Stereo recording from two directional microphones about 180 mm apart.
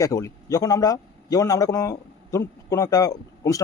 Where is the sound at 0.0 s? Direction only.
20° left (ahead or behind).